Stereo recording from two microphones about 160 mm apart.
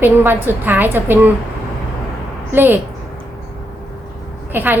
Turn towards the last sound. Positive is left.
turn(degrees=-10)  # may be behind; listen again after turning